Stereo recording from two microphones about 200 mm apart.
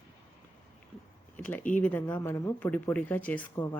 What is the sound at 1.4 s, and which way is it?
Speech, 10° left (ahead or behind).